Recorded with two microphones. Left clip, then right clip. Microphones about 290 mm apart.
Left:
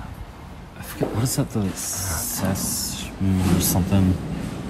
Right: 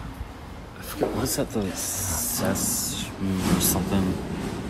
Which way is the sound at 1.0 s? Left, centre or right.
Left.